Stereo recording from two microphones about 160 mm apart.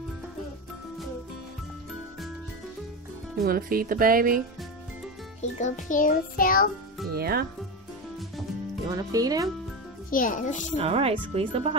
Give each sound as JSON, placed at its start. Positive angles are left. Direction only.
{"t": 3.4, "sound": "speech", "side_deg": -65}
{"t": 5.4, "sound": "a child's voice", "side_deg": 50}
{"t": 7.2, "sound": "speech", "side_deg": -75}
{"t": 8.8, "sound": "speech", "side_deg": -25}
{"t": 10.1, "sound": "a child's voice", "side_deg": 55}
{"t": 10.8, "sound": "speech", "side_deg": -40}